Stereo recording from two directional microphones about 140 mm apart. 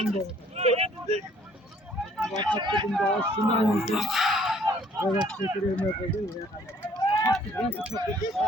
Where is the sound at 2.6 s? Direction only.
30° right (ahead or behind).